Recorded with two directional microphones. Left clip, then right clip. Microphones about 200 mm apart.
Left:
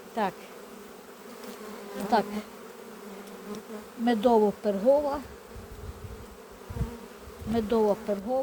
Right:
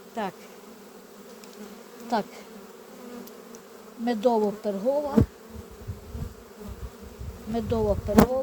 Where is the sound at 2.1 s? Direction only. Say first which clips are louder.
Left 2 dB; 10° right (ahead or behind).